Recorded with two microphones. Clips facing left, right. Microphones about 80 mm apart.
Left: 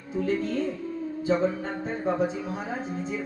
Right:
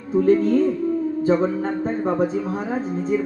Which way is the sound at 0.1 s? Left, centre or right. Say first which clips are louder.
Right 11 dB; right.